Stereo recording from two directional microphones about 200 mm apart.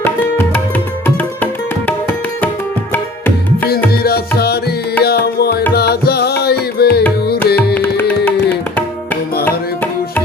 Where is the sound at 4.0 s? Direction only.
50° left (ahead or behind).